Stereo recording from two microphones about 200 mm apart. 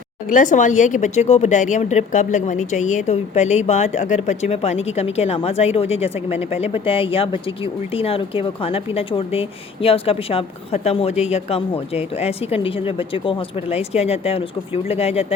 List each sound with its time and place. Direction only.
0.3 s speech: 40° left (ahead or behind)